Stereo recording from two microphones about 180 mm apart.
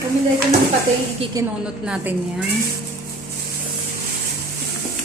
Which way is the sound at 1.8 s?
5° right (ahead or behind).